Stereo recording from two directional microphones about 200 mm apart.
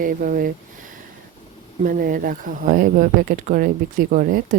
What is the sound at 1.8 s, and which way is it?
Speech, 45° right (ahead or behind).